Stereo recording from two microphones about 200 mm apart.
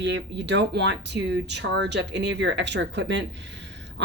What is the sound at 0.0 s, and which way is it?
Speech, 60° right (ahead or behind).